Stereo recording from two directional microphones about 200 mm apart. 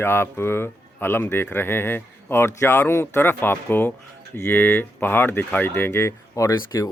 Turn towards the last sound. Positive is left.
turn(degrees=15)  # may be behind; listen again after turning